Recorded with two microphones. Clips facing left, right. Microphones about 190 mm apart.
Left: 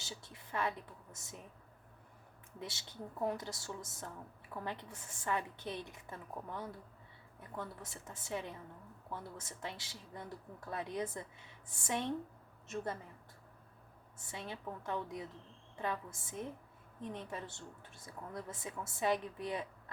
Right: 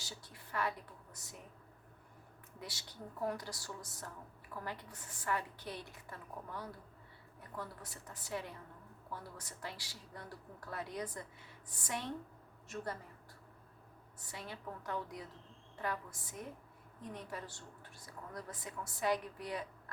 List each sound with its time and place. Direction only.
0.0 s a woman's voice: 25° left (ahead or behind)
2.6 s a woman's voice: 25° left (ahead or behind)
14.2 s a woman's voice: 25° left (ahead or behind)